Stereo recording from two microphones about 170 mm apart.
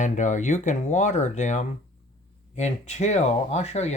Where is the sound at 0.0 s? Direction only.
45° left (ahead or behind).